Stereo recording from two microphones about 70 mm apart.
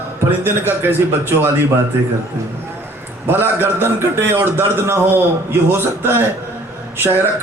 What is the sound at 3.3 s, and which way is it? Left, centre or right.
A man's voice, right.